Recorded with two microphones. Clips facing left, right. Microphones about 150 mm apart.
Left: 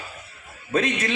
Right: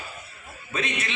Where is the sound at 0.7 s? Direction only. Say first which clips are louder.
Left 7 dB; 45° left (ahead or behind).